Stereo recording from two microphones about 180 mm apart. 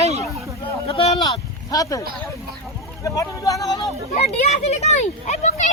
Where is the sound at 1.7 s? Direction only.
20° left (ahead or behind).